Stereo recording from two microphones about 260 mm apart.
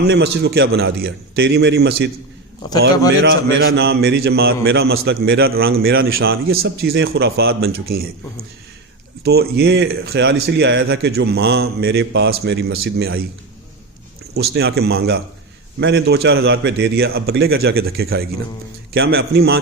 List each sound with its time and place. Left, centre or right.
0.0 s speech: right
3.2 s speech: right
9.2 s speech: right
14.3 s speech: right